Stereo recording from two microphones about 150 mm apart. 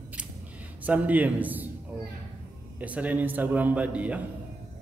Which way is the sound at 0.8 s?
10° right (ahead or behind).